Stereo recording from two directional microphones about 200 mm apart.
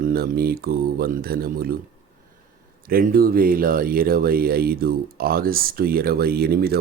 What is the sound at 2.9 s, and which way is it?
Speech, 50° right (ahead or behind).